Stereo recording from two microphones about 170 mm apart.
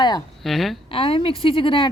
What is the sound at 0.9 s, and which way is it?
Speech, 35° left (ahead or behind).